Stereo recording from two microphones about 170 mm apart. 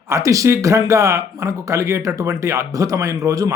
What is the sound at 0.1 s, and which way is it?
Speech, 20° right (ahead or behind).